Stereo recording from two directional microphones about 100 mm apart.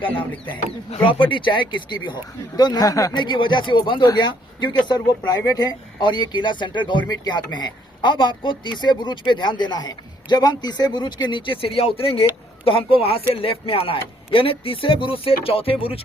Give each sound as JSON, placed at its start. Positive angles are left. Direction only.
{"t": 0.5, "sound": "a man's voice", "side_deg": 60}
{"t": 3.2, "sound": "a man's voice", "side_deg": 50}